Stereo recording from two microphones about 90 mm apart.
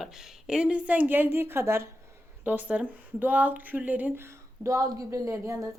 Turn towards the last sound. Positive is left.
turn(degrees=-35)  # may be behind; listen again after turning